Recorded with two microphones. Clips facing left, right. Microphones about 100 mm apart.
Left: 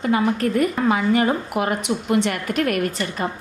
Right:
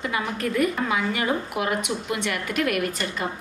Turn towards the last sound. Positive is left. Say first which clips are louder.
# left 3 dB
turn(degrees=40)  # may be behind; listen again after turning